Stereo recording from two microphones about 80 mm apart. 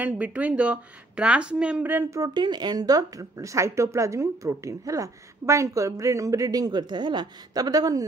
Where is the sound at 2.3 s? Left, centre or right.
Right.